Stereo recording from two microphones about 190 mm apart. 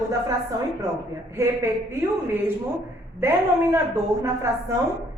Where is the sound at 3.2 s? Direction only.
10° right (ahead or behind).